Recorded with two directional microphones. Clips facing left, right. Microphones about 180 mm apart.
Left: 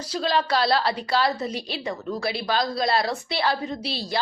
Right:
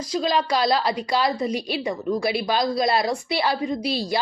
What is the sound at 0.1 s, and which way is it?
A woman's voice, 10° right (ahead or behind).